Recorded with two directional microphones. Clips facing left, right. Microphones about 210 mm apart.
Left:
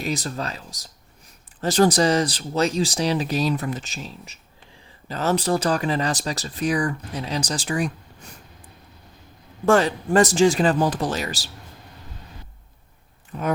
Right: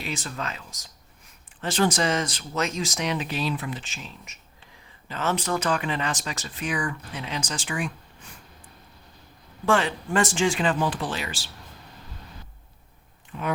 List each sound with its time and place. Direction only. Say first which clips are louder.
0.0 s speech: left 5 dB; 40° left (ahead or behind)
9.6 s speech: left 5 dB; 40° left (ahead or behind)
13.3 s speech: left 4 dB; 40° left (ahead or behind)